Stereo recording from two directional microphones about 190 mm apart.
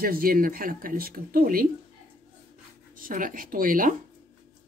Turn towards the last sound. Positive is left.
turn(degrees=-45)  # may be behind; listen again after turning